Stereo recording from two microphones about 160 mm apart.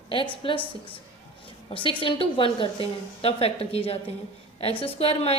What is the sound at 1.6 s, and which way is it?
A woman's voice, 30° left (ahead or behind).